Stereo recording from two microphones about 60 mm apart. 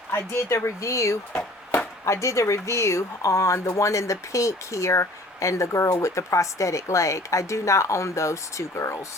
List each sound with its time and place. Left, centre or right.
0.1 s speech: left